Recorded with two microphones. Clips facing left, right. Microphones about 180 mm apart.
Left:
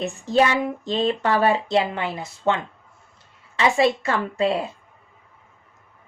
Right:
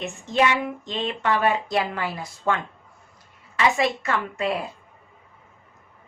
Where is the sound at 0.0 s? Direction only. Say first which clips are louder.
Left 3 dB; 35° left (ahead or behind).